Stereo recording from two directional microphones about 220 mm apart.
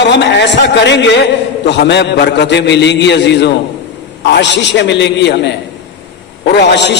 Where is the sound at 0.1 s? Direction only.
50° left (ahead or behind).